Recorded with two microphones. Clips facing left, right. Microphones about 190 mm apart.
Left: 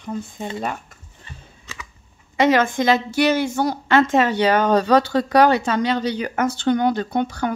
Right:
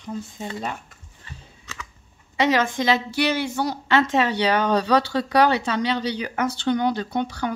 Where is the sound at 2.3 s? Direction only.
50° left (ahead or behind).